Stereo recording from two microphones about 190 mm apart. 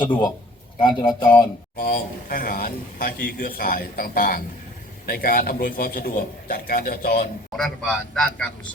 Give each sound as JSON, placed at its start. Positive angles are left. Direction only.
{"t": 0.8, "sound": "speech", "side_deg": 20}
{"t": 1.8, "sound": "a man's voice", "side_deg": 50}
{"t": 7.5, "sound": "a man's voice", "side_deg": 5}